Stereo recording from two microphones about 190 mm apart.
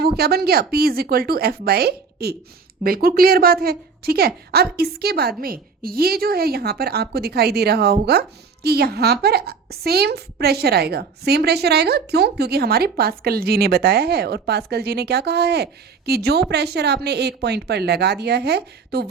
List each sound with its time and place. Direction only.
0.0 s a woman's voice: 55° right (ahead or behind)